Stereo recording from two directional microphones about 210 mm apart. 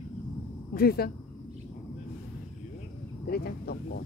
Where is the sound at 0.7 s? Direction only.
45° left (ahead or behind).